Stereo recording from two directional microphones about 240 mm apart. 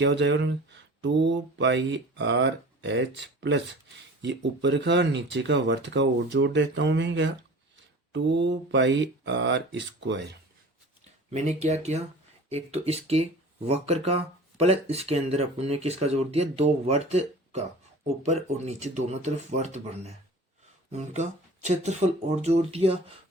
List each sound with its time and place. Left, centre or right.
0.0 s speech: right
11.3 s speech: right